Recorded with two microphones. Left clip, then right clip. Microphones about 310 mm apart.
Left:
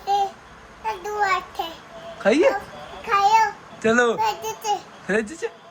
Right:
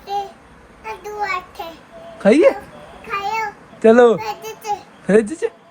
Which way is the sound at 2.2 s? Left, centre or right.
Centre.